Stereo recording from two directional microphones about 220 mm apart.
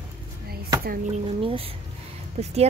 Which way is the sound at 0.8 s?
40° right (ahead or behind).